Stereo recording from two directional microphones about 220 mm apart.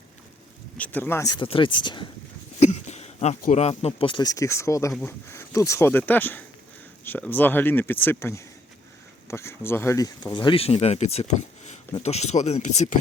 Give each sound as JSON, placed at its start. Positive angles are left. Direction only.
{"t": 0.8, "sound": "speech", "side_deg": 10}
{"t": 2.6, "sound": "speech", "side_deg": 30}